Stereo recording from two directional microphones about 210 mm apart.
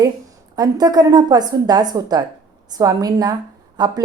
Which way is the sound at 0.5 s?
20° right (ahead or behind).